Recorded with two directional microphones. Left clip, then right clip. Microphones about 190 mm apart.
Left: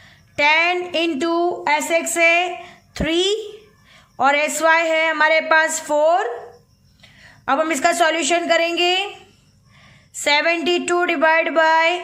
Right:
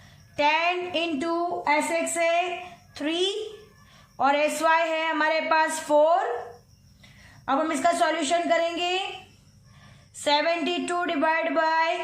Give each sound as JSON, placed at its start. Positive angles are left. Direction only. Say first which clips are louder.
{"t": 0.3, "sound": "a woman's voice", "louder": "left 7 dB", "side_deg": 40}
{"t": 7.4, "sound": "a woman's voice", "louder": "left 6 dB", "side_deg": 45}
{"t": 10.2, "sound": "a woman's voice", "louder": "left 6 dB", "side_deg": 40}